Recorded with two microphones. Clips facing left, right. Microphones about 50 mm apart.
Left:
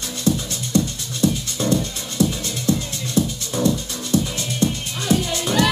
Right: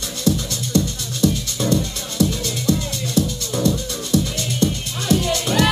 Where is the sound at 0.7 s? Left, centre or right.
Left.